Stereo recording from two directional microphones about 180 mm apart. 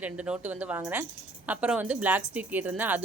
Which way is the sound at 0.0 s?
10° right (ahead or behind).